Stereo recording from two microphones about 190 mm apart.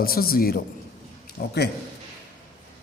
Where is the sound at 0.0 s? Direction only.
50° left (ahead or behind).